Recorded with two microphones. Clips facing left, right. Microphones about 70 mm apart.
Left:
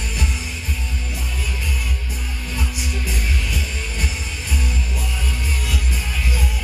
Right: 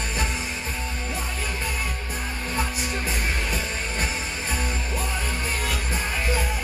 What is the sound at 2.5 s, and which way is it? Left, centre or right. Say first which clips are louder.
Music: right 1 dB; right.